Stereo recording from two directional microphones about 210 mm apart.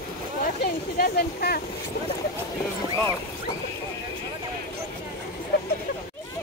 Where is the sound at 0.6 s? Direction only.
50° left (ahead or behind).